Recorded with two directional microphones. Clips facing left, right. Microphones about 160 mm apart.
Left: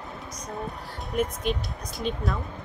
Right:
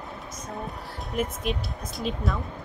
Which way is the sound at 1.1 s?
Centre (ahead or behind).